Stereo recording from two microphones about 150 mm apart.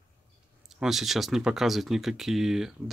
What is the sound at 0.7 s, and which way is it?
Speech, 5° right (ahead or behind).